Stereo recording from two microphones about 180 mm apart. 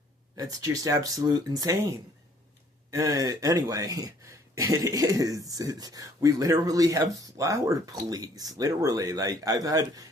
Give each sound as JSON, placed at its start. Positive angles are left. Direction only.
{"t": 0.3, "sound": "speech", "side_deg": -20}
{"t": 2.9, "sound": "speech", "side_deg": -20}